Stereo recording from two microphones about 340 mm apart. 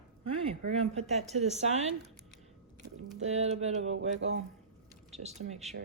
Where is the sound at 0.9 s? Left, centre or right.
Centre.